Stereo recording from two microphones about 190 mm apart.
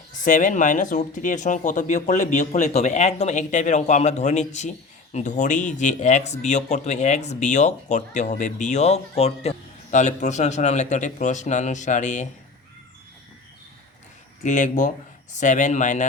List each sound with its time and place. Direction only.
0.2 s speech: 40° left (ahead or behind)
14.4 s speech: 40° left (ahead or behind)